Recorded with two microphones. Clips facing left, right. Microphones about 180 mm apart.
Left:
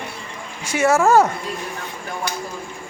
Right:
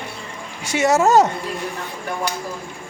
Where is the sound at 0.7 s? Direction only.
20° right (ahead or behind).